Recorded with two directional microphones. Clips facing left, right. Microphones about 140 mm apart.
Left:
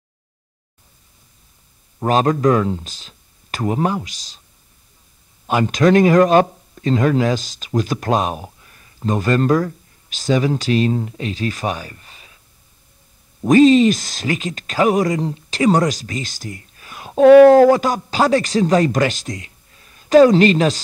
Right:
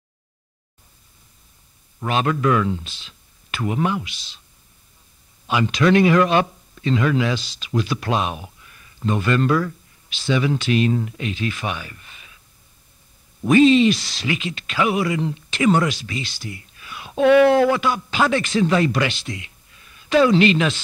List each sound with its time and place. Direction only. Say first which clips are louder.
2.0 s speech: left 5 dB; 40° left (ahead or behind)
5.5 s speech: left 3 dB; 45° left (ahead or behind)
13.4 s speech: left 3 dB; 40° left (ahead or behind)